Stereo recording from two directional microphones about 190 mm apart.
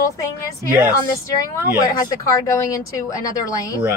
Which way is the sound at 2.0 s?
20° left (ahead or behind).